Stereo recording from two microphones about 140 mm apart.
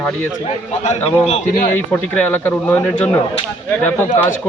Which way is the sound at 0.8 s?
45° left (ahead or behind).